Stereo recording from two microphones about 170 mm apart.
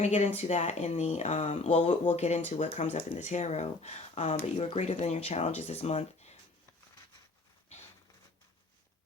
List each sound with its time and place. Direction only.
0.0 s speech: 45° left (ahead or behind)